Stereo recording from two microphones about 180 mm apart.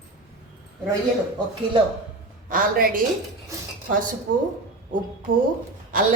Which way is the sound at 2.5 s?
50° right (ahead or behind).